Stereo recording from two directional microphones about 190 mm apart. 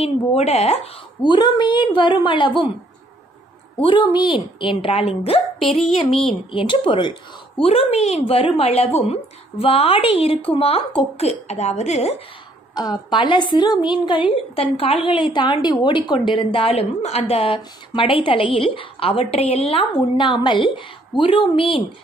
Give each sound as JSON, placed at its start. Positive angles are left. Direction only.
{"t": 0.0, "sound": "a woman's voice", "side_deg": 35}
{"t": 1.2, "sound": "a woman's voice", "side_deg": 25}
{"t": 3.8, "sound": "a woman's voice", "side_deg": 25}
{"t": 6.5, "sound": "a woman's voice", "side_deg": 25}
{"t": 12.7, "sound": "a woman's voice", "side_deg": 20}